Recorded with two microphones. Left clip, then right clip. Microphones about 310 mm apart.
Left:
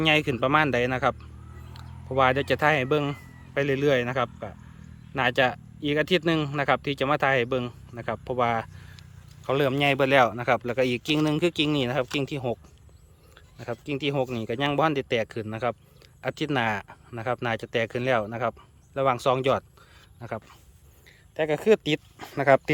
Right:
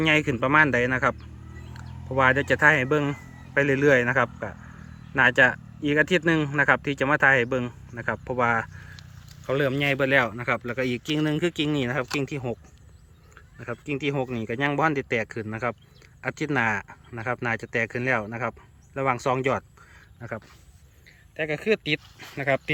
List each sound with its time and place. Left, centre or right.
0.0 s speech: centre
2.1 s speech: centre